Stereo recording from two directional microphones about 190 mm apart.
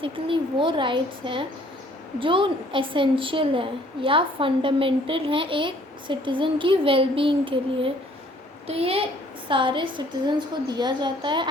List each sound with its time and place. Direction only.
0.0 s a woman's voice: 25° right (ahead or behind)